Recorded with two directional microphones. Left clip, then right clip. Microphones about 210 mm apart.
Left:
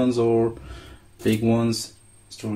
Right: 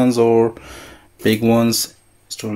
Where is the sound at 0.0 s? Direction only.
35° right (ahead or behind).